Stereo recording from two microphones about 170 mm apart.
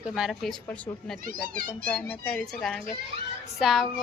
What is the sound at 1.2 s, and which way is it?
Speech, 55° right (ahead or behind).